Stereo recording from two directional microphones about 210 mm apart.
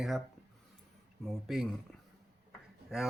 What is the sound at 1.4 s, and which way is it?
Speech, centre (ahead or behind).